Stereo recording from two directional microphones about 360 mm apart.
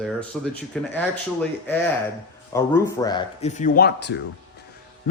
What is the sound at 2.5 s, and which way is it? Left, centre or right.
Speech, centre.